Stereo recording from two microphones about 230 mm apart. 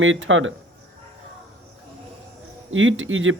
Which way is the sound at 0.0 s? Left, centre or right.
Right.